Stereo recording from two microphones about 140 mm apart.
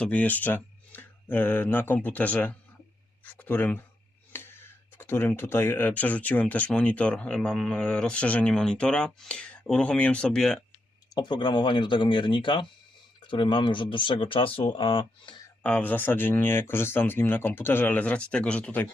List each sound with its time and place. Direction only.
0.0 s speech: 10° left (ahead or behind)
11.1 s speech: 30° left (ahead or behind)
15.6 s speech: 10° left (ahead or behind)